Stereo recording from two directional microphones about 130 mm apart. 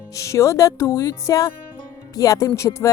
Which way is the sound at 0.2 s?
20° left (ahead or behind).